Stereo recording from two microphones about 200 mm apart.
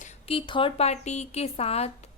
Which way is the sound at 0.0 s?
30° left (ahead or behind).